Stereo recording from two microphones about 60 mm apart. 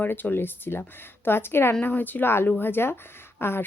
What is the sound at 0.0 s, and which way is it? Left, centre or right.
Speech, left.